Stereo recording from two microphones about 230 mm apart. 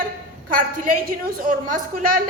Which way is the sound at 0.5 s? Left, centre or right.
Right.